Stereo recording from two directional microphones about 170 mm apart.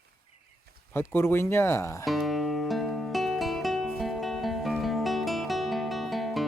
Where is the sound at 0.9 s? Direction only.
15° left (ahead or behind).